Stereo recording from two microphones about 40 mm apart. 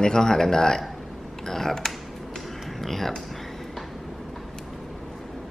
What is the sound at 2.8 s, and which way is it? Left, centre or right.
Speech, centre.